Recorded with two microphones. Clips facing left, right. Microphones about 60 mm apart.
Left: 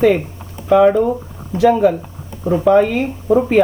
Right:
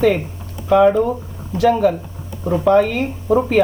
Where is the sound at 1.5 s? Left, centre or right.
Centre.